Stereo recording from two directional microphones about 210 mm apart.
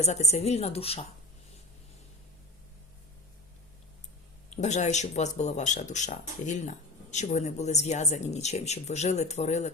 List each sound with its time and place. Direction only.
0.0 s speech: 30° left (ahead or behind)
4.4 s speech: 35° left (ahead or behind)